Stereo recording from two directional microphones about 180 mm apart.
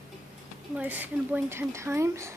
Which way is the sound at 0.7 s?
10° right (ahead or behind).